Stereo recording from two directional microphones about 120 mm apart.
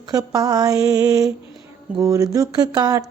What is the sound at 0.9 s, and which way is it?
Speech, 30° right (ahead or behind).